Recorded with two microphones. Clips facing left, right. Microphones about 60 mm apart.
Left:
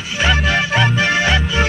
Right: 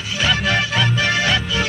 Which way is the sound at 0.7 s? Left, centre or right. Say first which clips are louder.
Left 3 dB; left.